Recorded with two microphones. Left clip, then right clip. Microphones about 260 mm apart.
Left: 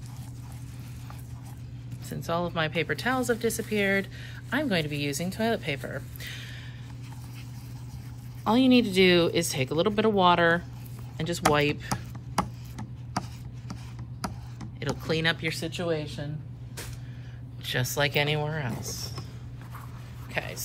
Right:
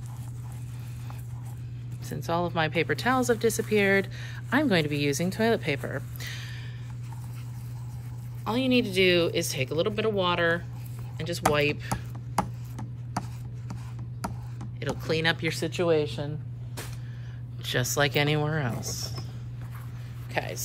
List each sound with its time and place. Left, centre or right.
2.0 s speech: centre
8.5 s speech: centre
11.1 s a sound: centre
14.2 s vehicle: centre
15.6 s speech: right
17.6 s speech: centre
20.3 s a sound: centre